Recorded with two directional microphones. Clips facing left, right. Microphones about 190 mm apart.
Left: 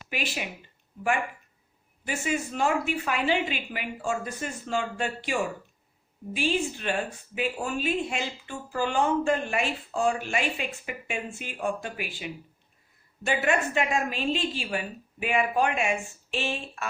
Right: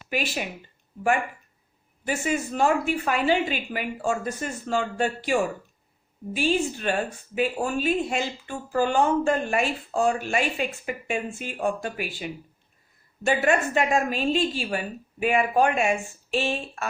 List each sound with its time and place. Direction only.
0.1 s speech: 40° right (ahead or behind)
2.0 s speech: 40° right (ahead or behind)